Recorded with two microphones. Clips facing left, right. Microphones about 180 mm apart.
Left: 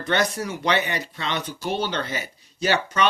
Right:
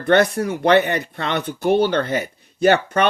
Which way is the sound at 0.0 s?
55° right (ahead or behind).